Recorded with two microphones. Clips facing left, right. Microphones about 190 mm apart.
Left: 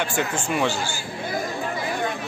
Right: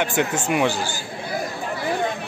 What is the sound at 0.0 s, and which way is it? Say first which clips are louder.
Speech: right 3 dB; 20° right (ahead or behind).